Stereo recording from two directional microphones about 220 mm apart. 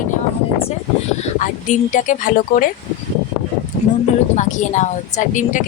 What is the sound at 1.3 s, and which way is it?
A woman's voice, 35° left (ahead or behind).